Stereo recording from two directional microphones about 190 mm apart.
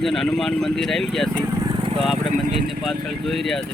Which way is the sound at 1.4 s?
15° right (ahead or behind).